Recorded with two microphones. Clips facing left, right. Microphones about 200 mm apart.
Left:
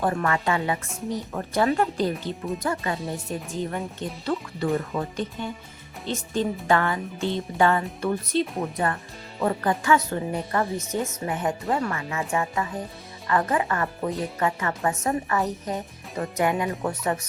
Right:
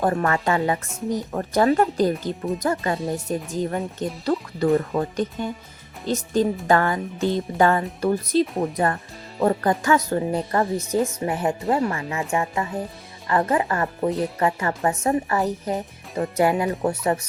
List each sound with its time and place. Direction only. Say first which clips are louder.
0.0 s speech: right 3 dB; 40° right (ahead or behind)